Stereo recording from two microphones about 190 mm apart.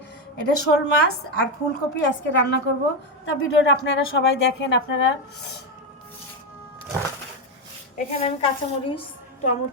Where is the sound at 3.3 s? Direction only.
70° left (ahead or behind).